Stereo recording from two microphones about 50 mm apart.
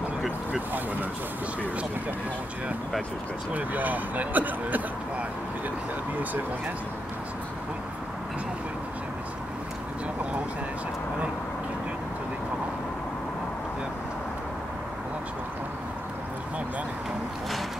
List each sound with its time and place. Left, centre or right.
3.5 s speech: right